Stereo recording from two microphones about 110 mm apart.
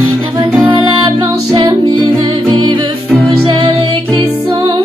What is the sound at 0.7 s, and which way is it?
Music, 50° right (ahead or behind).